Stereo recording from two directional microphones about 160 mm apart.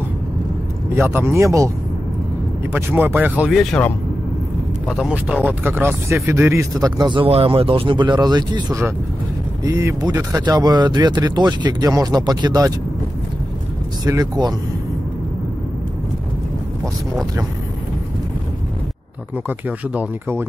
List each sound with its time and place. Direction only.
0.9 s speech: 15° right (ahead or behind)
2.7 s speech: 10° right (ahead or behind)
4.8 s speech: 5° right (ahead or behind); by 12.7 s 25° right (ahead or behind)
14.0 s speech: 25° right (ahead or behind)
19.9 s speech: 10° right (ahead or behind)